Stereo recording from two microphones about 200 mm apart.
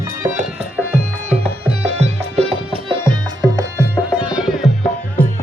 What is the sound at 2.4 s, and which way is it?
Music, 30° right (ahead or behind).